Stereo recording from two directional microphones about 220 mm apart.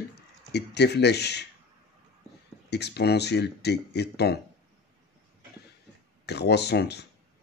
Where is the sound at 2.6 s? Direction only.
50° left (ahead or behind).